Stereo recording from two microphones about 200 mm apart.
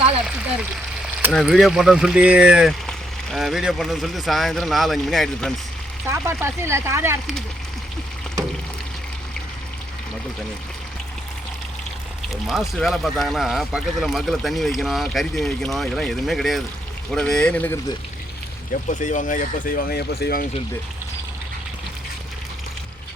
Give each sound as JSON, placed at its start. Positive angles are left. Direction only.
{"t": 1.3, "sound": "speech", "side_deg": 0}
{"t": 6.1, "sound": "speech", "side_deg": -10}
{"t": 12.3, "sound": "speech", "side_deg": 0}
{"t": 18.9, "sound": "speech", "side_deg": 40}